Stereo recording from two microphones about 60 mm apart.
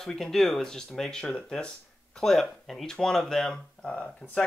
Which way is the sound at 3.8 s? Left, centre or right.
Left.